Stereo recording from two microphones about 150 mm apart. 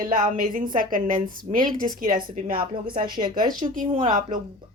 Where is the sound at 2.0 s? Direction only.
30° right (ahead or behind).